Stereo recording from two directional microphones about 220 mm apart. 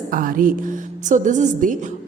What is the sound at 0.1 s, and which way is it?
A woman's voice, 40° right (ahead or behind).